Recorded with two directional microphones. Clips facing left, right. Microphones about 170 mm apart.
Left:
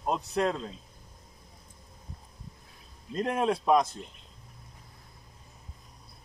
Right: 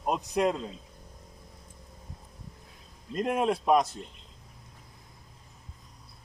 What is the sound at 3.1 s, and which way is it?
Speech, 5° right (ahead or behind).